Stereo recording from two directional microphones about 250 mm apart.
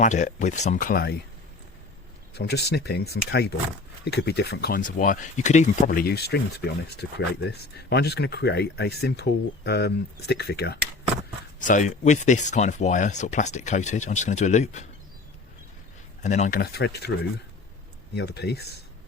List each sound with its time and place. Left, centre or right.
0.0 s speech: left
2.3 s speech: left
11.6 s speech: left
16.2 s speech: left